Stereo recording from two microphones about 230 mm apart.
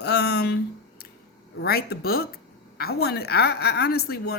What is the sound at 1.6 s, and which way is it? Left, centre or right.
Speech, left.